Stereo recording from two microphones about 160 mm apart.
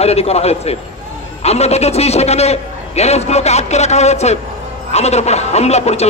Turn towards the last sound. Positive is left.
turn(degrees=40)  # may be behind; listen again after turning